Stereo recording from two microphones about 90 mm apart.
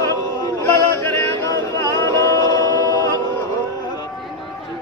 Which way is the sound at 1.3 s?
40° left (ahead or behind).